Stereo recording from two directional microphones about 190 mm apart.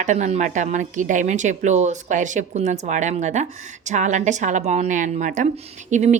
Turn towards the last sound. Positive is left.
turn(degrees=-40)  # may be behind; listen again after turning